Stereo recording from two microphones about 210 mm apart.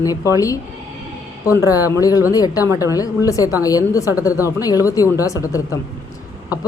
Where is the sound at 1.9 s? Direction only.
15° left (ahead or behind).